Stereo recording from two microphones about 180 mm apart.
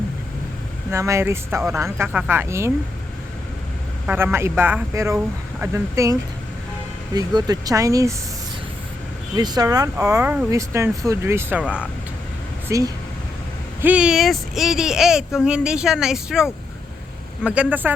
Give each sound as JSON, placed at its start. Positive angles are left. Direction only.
{"t": 0.9, "sound": "speech", "side_deg": -15}
{"t": 4.0, "sound": "speech", "side_deg": -10}
{"t": 9.3, "sound": "speech", "side_deg": -20}
{"t": 12.6, "sound": "speech", "side_deg": -20}
{"t": 13.8, "sound": "speech", "side_deg": -5}